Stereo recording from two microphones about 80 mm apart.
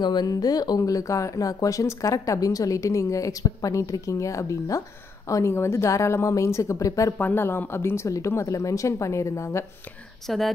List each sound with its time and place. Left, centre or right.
0.0 s speech: left
7.2 s speech: left
10.2 s speech: centre